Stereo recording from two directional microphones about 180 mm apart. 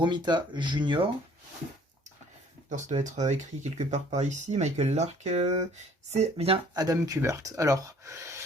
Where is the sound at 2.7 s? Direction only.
40° right (ahead or behind).